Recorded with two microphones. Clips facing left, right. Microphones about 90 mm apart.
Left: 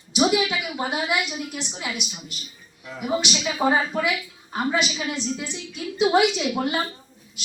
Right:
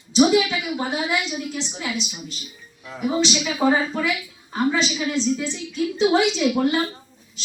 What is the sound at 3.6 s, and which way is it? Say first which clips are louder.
A woman's voice: right 1 dB; 15° left (ahead or behind).